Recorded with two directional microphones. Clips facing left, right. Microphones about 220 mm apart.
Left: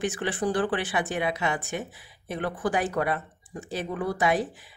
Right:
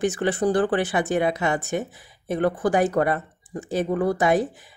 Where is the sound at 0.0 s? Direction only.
40° right (ahead or behind).